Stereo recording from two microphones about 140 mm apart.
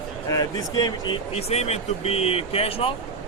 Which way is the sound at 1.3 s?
50° left (ahead or behind).